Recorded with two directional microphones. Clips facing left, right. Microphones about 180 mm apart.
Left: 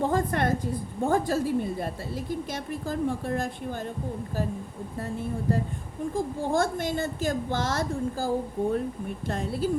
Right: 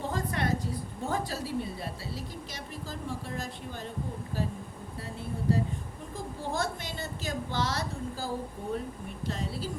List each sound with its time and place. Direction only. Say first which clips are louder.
0.0 s a woman's voice: left 7 dB; 50° left (ahead or behind)
6.5 s a woman's voice: left 7 dB; 50° left (ahead or behind)